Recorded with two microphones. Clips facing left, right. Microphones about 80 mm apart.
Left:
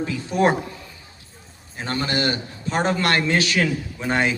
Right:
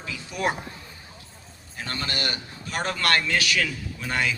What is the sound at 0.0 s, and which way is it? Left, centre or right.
Speech, left.